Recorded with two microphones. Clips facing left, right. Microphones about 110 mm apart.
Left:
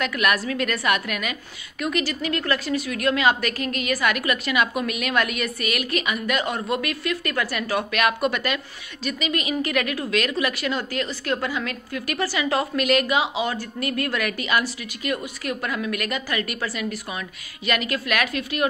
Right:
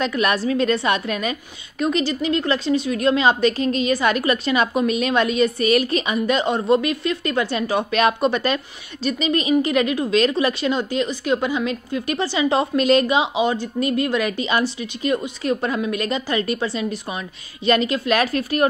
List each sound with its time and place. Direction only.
0.0 s a woman's voice: 25° right (ahead or behind)